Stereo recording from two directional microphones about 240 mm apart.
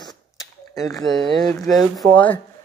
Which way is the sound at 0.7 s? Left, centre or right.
Centre.